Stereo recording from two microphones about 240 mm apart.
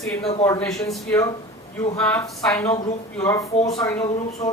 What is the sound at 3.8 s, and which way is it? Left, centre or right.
Speech, centre.